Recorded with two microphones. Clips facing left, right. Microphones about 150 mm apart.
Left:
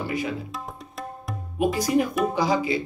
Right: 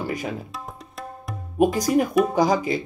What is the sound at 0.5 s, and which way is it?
Music, centre (ahead or behind).